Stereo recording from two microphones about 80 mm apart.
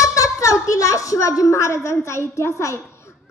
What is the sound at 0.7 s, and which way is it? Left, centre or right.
A woman's voice, left.